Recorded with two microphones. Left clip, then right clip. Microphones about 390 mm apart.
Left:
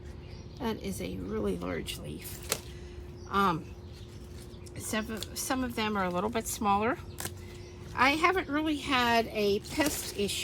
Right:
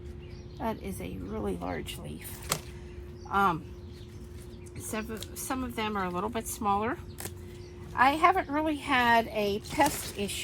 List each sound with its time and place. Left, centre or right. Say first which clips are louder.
0.6 s speech: even; centre
3.3 s speech: right 2 dB; centre
4.9 s a woman's voice: left 2 dB; centre